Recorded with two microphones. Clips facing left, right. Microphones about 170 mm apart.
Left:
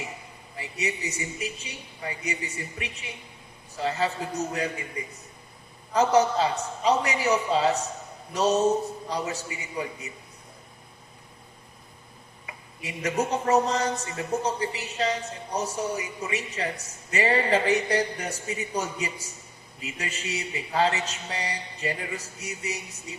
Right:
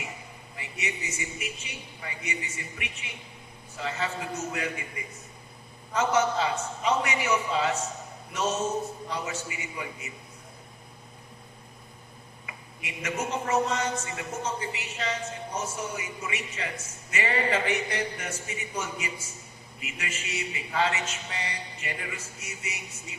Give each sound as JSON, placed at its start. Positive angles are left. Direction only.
{"t": 0.6, "sound": "a man's voice", "side_deg": 35}
{"t": 5.9, "sound": "a man's voice", "side_deg": 35}
{"t": 12.5, "sound": "a man's voice", "side_deg": 35}